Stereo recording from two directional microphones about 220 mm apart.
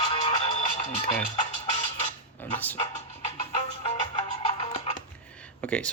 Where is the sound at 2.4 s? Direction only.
10° left (ahead or behind).